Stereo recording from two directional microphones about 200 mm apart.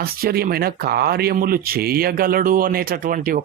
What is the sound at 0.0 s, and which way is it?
Speech, 50° right (ahead or behind).